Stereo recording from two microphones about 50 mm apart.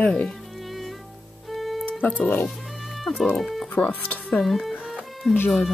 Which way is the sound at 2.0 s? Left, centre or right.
Left.